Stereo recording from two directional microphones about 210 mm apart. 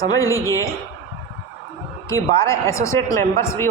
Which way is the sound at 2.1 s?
15° left (ahead or behind).